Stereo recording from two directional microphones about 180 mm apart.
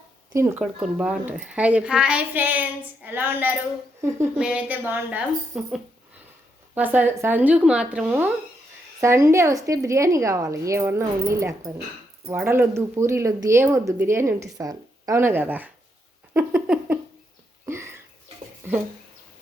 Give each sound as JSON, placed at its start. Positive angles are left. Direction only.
{"t": 0.3, "sound": "speech", "side_deg": -15}
{"t": 0.6, "sound": "speech", "side_deg": -5}
{"t": 6.7, "sound": "speech", "side_deg": -10}
{"t": 16.3, "sound": "a sound", "side_deg": -10}